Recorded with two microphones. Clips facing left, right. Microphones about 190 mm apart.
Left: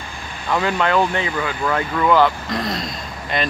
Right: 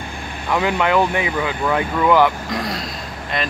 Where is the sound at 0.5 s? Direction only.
15° right (ahead or behind).